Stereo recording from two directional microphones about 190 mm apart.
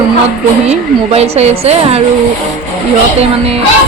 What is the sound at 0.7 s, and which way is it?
A woman's voice, 35° right (ahead or behind).